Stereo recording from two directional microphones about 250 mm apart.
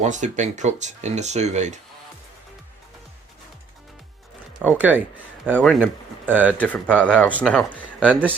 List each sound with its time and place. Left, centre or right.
0.0 s speech: right
4.8 s speech: centre
6.6 s speech: centre
7.7 s a man's voice: centre